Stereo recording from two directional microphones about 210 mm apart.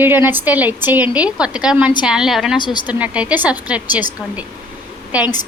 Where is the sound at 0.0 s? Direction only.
10° right (ahead or behind).